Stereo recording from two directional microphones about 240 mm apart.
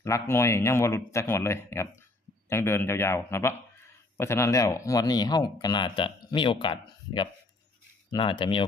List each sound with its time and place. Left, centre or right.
0.0 s speech: centre